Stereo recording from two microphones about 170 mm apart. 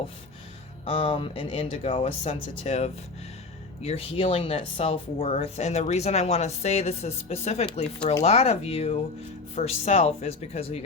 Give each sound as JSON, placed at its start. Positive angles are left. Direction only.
{"t": 0.9, "sound": "speech", "side_deg": 35}